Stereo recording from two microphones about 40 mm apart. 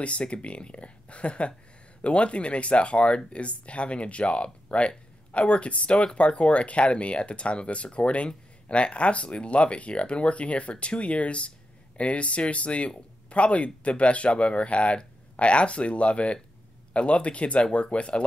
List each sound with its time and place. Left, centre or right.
0.0 s speech: left